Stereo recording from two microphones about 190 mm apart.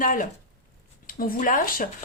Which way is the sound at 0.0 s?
45° left (ahead or behind).